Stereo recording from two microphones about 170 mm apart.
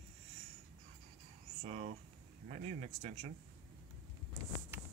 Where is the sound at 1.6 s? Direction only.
40° right (ahead or behind).